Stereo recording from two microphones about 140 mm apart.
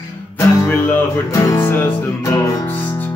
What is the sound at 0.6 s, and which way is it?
Music, 20° left (ahead or behind).